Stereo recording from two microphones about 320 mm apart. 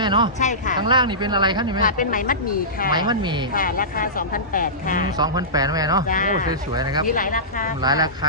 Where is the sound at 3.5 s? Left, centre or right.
Left.